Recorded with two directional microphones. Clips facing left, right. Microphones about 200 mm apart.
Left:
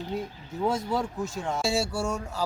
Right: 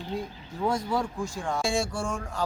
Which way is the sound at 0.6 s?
20° left (ahead or behind).